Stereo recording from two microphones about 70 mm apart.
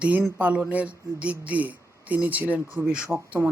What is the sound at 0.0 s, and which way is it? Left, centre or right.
Speech, right.